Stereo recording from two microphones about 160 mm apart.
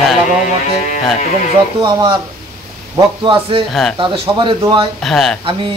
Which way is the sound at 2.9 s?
30° right (ahead or behind).